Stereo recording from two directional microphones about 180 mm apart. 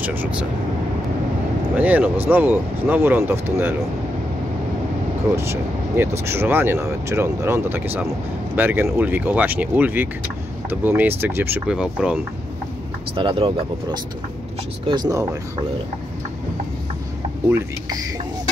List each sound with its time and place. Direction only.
0.0 s speech: 10° right (ahead or behind)
1.8 s speech: 10° right (ahead or behind)
5.3 s speech: 15° right (ahead or behind)
13.1 s speech: 30° right (ahead or behind)
14.9 s speech: 20° right (ahead or behind)
17.5 s speech: 15° right (ahead or behind)